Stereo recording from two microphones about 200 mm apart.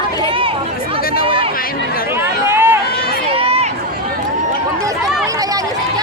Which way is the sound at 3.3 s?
30° right (ahead or behind).